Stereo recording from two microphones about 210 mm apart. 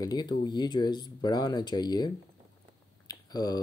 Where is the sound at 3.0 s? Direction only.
20° left (ahead or behind).